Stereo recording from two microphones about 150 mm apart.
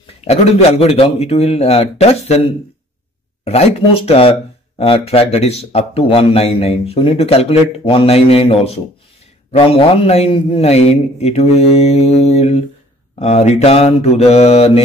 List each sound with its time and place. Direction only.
0.0 s a man's voice: 45° left (ahead or behind)
3.4 s a man's voice: 45° left (ahead or behind)